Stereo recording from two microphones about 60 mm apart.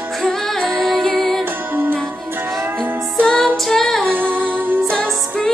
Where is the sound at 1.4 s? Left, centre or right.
Right.